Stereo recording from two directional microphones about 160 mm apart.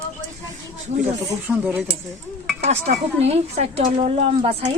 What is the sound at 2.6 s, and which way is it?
A woman's voice, 45° right (ahead or behind).